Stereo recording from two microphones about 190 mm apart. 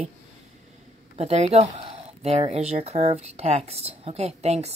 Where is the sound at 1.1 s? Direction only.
35° right (ahead or behind).